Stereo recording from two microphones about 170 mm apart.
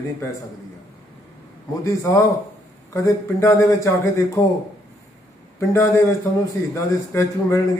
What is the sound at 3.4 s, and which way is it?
Speech, 20° left (ahead or behind).